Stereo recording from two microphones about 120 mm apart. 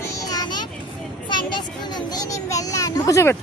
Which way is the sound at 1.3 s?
40° left (ahead or behind).